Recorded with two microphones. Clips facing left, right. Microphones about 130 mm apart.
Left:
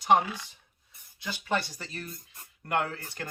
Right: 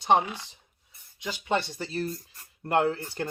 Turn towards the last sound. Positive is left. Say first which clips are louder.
# right 6 dB
turn(degrees=-25)  # may be behind; listen again after turning